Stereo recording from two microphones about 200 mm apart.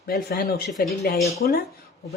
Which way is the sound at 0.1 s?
50° left (ahead or behind).